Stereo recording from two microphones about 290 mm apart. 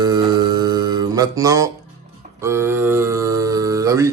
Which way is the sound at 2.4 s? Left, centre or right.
Centre.